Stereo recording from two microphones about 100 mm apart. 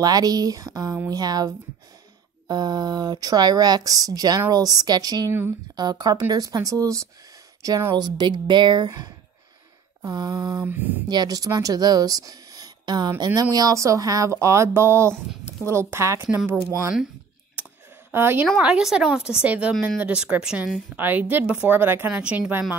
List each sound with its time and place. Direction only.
0.0 s speech: 40° right (ahead or behind)
7.9 s speech: 45° right (ahead or behind)
10.6 s speech: 20° right (ahead or behind)
11.1 s speech: 40° right (ahead or behind)
18.1 s speech: 20° right (ahead or behind)
18.6 s speech: 10° right (ahead or behind)